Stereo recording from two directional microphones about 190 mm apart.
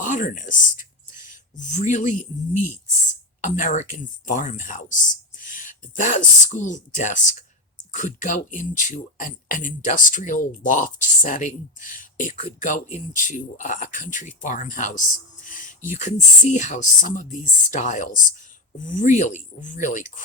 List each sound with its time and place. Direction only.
0.0 s speech: 40° left (ahead or behind)